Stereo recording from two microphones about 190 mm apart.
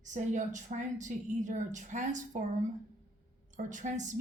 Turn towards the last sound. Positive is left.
turn(degrees=-40)  # may be behind; listen again after turning